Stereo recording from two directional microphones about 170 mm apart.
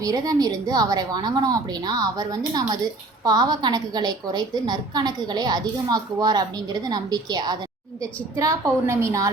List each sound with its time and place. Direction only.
0.0 s a woman's voice: 20° right (ahead or behind)